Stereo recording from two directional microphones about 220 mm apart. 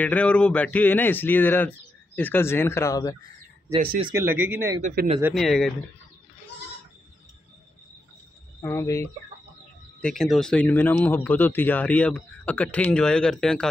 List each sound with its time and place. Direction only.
0.0 s speech: 5° left (ahead or behind)
4.0 s speech: 15° right (ahead or behind)
4.8 s speech: 30° right (ahead or behind)
5.3 s speech: centre (ahead or behind)
8.5 s speech: 15° left (ahead or behind)
10.0 s speech: centre (ahead or behind)